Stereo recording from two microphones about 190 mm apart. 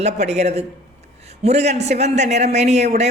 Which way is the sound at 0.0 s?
35° right (ahead or behind).